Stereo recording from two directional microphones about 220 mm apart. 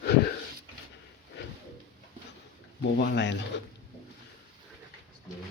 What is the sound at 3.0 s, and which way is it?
Speech, 50° left (ahead or behind).